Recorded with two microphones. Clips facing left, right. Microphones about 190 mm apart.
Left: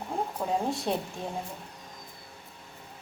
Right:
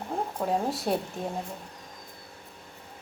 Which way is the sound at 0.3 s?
5° right (ahead or behind).